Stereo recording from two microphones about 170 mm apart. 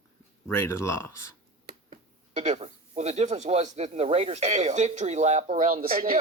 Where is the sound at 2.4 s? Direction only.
40° right (ahead or behind).